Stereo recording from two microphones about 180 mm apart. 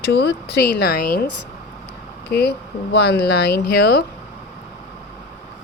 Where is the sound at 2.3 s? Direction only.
65° left (ahead or behind).